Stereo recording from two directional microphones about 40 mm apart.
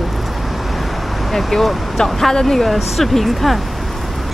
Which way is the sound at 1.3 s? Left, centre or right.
Centre.